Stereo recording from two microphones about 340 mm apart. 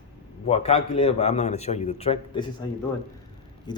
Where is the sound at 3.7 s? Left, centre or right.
Centre.